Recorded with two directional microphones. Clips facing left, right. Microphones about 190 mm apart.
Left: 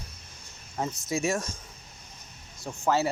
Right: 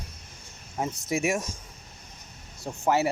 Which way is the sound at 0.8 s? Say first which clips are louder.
Right 1 dB; 20° right (ahead or behind).